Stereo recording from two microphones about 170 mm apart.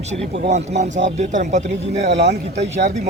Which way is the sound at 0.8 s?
90° right.